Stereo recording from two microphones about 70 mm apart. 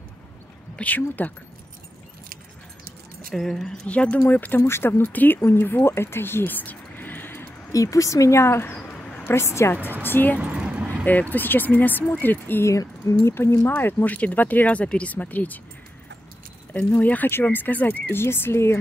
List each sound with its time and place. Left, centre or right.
0.7 s speech: left
3.3 s speech: centre
3.8 s speech: centre
4.6 s speech: left
7.7 s speech: left
10.0 s speech: left
10.4 s a sound: centre
11.1 s speech: left
16.7 s speech: left
18.2 s speech: left